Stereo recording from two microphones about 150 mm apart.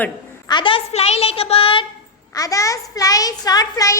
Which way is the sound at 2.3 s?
25° left (ahead or behind).